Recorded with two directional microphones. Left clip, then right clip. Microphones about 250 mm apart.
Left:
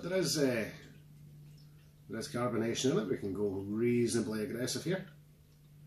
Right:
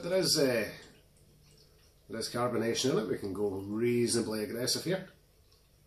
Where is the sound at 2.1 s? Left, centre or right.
Centre.